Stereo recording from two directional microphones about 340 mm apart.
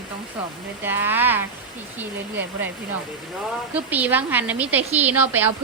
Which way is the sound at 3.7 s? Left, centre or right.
Centre.